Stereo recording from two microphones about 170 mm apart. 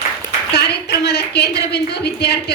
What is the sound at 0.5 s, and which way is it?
A woman's voice, 70° left (ahead or behind).